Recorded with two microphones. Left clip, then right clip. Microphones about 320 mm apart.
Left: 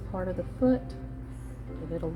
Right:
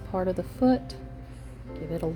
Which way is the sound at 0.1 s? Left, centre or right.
Right.